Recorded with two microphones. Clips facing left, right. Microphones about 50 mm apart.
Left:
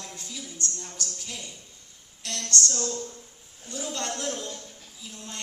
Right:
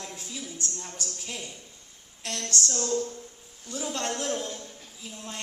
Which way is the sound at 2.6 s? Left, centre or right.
Centre.